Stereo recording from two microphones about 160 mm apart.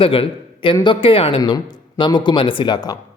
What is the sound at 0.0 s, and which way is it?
Speech, 35° left (ahead or behind).